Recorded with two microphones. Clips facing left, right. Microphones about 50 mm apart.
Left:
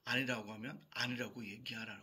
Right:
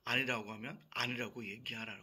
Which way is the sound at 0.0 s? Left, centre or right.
Right.